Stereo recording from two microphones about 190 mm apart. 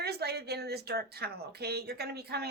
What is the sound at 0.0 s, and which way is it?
Speech, 55° right (ahead or behind).